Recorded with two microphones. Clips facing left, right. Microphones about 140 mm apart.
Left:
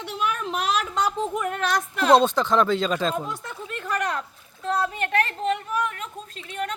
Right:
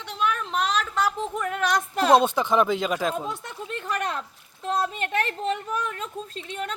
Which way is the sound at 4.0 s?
25° right (ahead or behind).